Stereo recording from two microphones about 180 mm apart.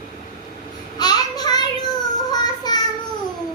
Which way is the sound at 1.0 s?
20° left (ahead or behind).